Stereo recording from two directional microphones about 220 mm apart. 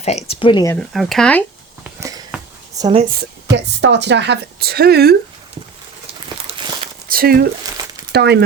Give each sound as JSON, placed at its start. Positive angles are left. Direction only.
{"t": 0.0, "sound": "speech", "side_deg": 30}
{"t": 0.8, "sound": "speech", "side_deg": 0}
{"t": 1.8, "sound": "a sound", "side_deg": -15}
{"t": 2.7, "sound": "a woman's voice", "side_deg": -15}
{"t": 3.0, "sound": "speech", "side_deg": -45}
{"t": 6.5, "sound": "a sound", "side_deg": -25}
{"t": 7.1, "sound": "speech", "side_deg": -40}